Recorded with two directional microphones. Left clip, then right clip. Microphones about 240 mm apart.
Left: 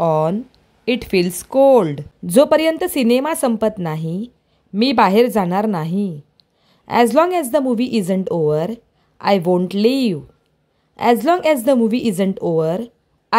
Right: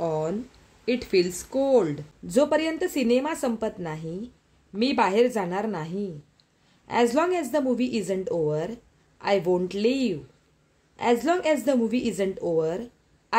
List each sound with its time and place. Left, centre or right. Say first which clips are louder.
0.0 s a woman's voice: left 11 dB; left